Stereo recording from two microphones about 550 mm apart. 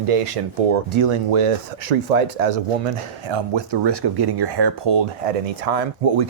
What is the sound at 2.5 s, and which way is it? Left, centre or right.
Speech, right.